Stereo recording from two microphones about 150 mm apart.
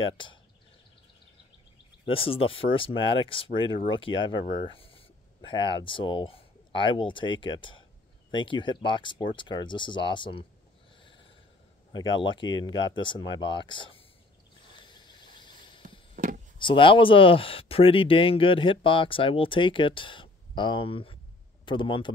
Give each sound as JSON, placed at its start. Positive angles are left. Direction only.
{"t": 0.0, "sound": "speech", "side_deg": 35}
{"t": 2.1, "sound": "speech", "side_deg": 40}
{"t": 11.9, "sound": "speech", "side_deg": 30}
{"t": 14.9, "sound": "cricket", "side_deg": 30}
{"t": 15.8, "sound": "a sound", "side_deg": -65}
{"t": 16.5, "sound": "speech", "side_deg": 35}